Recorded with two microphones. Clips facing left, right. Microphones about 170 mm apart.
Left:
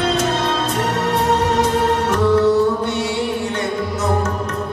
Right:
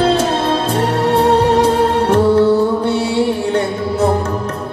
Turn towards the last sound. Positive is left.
turn(degrees=-30)  # may be behind; listen again after turning